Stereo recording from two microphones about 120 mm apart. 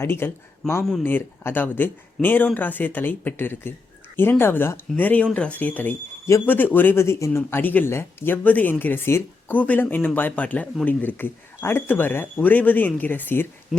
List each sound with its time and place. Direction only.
0.0 s speech: 20° left (ahead or behind)
0.6 s speech: 5° left (ahead or behind)
1.0 s speech: 15° left (ahead or behind)